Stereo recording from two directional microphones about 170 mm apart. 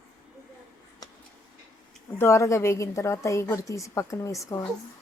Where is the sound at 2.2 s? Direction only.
15° left (ahead or behind).